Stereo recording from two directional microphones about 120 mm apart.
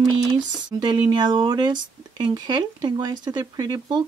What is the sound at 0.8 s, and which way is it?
Speech, 40° right (ahead or behind).